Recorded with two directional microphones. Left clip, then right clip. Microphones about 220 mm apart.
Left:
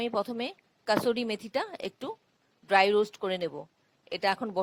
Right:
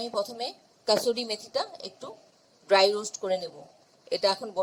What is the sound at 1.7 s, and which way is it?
Speech, 40° left (ahead or behind).